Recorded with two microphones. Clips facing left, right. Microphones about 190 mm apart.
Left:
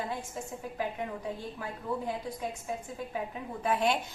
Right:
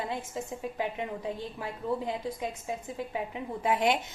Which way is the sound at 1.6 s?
20° right (ahead or behind).